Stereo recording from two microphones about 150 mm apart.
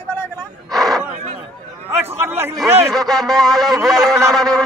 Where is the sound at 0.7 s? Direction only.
Centre (ahead or behind).